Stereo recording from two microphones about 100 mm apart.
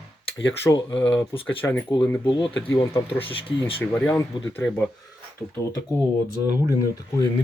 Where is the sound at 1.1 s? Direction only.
60° left (ahead or behind).